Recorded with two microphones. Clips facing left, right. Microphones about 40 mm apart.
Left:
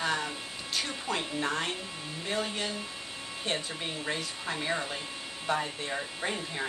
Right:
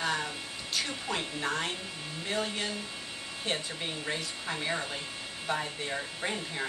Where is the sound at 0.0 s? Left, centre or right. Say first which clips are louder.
Left 1 dB; centre.